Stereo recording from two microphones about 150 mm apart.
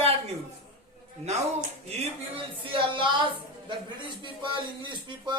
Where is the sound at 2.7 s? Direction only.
35° right (ahead or behind).